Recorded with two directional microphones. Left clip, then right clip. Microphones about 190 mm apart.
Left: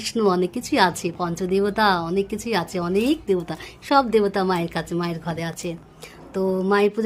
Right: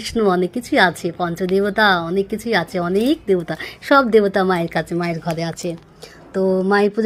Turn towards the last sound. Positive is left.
turn(degrees=-15)  # may be behind; listen again after turning